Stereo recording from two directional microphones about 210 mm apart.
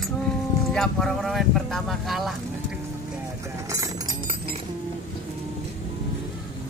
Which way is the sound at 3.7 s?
15° right (ahead or behind).